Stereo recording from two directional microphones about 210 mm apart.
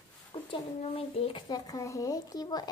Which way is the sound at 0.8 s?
25° left (ahead or behind).